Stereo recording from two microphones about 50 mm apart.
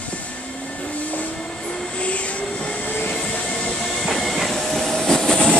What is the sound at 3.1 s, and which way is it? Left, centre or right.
Train, centre.